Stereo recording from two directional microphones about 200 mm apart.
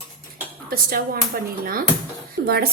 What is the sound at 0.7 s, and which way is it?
Speech, 45° right (ahead or behind).